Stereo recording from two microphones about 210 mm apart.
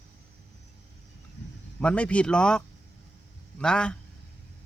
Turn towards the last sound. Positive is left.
turn(degrees=5)  # may be behind; listen again after turning